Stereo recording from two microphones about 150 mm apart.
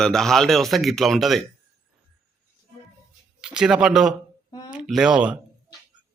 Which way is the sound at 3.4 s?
5° right (ahead or behind).